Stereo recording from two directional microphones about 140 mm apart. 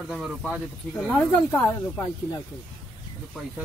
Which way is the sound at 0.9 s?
15° left (ahead or behind).